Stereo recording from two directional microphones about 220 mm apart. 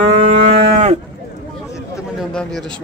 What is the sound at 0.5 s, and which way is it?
Cattle, 30° right (ahead or behind).